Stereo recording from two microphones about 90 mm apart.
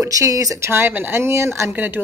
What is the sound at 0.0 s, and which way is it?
Speech, 40° right (ahead or behind).